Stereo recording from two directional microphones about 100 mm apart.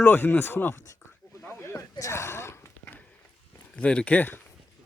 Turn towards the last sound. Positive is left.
turn(degrees=20)  # may be behind; listen again after turning